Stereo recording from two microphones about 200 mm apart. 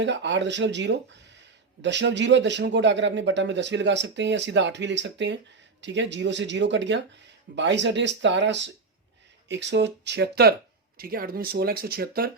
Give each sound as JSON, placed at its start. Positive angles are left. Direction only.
{"t": 0.0, "sound": "speech", "side_deg": -60}